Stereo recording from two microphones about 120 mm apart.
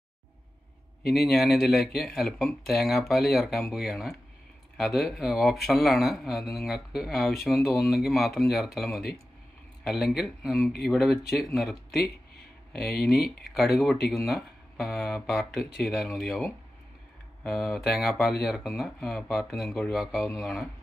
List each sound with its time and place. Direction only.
1.0 s speech: centre (ahead or behind)